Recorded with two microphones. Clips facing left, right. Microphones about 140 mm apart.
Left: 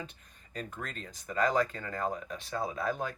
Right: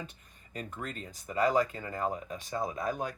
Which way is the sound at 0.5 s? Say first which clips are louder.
Right 1 dB; 10° right (ahead or behind).